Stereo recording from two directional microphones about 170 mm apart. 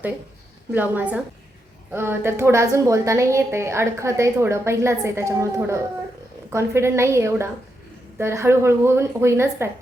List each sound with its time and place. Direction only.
0.7 s a woman's voice: 10° right (ahead or behind)